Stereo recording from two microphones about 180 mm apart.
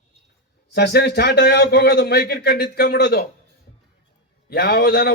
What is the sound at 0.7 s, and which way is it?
A man's voice, 65° left (ahead or behind).